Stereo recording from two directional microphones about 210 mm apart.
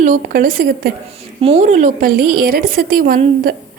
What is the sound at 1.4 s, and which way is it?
A woman's voice, 30° right (ahead or behind).